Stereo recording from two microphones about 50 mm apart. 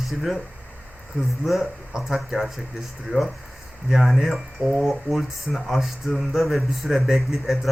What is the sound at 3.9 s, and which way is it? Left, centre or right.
A man's voice, centre.